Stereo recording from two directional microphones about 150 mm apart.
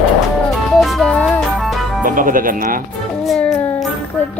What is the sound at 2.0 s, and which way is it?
Speech, 65° right (ahead or behind).